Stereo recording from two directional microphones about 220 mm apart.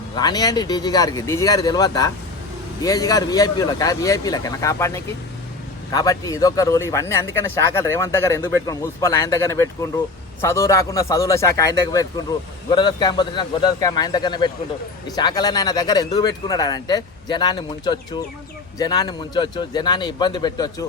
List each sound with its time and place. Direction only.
0.2 s a man's voice: 15° left (ahead or behind)